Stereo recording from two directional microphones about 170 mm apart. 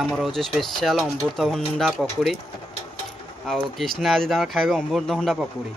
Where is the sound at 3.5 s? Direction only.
Centre (ahead or behind).